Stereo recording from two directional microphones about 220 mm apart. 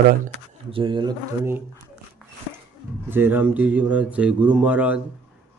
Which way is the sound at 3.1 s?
10° right (ahead or behind).